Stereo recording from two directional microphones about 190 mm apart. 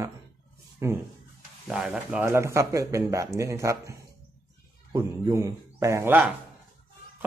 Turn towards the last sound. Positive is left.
turn(degrees=-10)  # may be behind; listen again after turning